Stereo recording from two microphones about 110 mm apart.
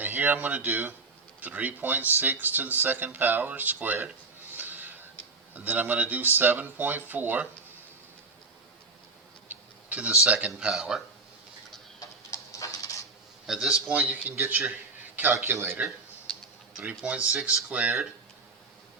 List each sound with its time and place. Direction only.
0.0 s a man's voice: 15° right (ahead or behind)
9.9 s a man's voice: 10° right (ahead or behind)
11.9 s a sound: 30° left (ahead or behind)
13.5 s a man's voice: 5° right (ahead or behind); by 15.9 s 20° right (ahead or behind)
17.3 s a man's voice: 10° right (ahead or behind)